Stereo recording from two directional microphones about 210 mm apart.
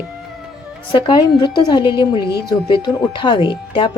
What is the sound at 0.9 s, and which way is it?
Speech, 20° left (ahead or behind).